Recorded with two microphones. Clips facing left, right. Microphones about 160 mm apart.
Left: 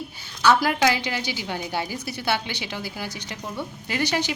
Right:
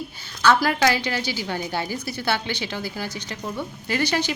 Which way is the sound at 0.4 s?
15° left (ahead or behind).